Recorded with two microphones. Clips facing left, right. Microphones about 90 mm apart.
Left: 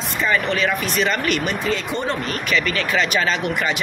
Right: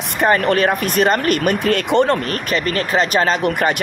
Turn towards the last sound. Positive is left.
turn(degrees=-40)  # may be behind; listen again after turning